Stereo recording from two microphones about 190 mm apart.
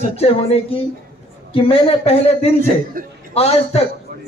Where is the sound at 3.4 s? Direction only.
35° left (ahead or behind).